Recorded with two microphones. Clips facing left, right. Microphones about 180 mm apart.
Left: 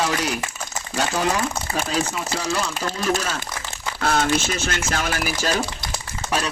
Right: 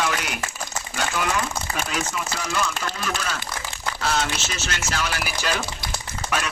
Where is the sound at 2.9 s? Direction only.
40° left (ahead or behind).